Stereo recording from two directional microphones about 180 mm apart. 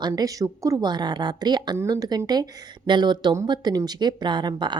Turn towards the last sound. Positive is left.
turn(degrees=-25)  # may be behind; listen again after turning